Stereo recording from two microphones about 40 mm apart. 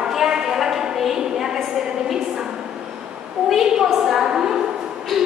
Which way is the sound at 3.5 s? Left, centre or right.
Centre.